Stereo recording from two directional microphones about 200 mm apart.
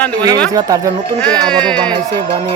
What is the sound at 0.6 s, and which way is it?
Speech, 15° right (ahead or behind).